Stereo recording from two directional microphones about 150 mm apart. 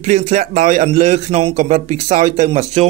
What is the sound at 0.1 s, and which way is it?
A man's voice, 55° right (ahead or behind).